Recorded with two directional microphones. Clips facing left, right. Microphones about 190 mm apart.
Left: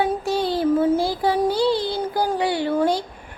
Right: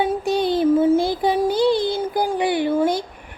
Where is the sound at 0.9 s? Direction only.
20° right (ahead or behind).